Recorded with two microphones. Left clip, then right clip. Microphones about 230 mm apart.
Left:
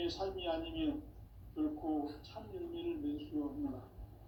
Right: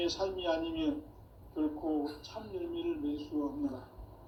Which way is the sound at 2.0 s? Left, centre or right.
Right.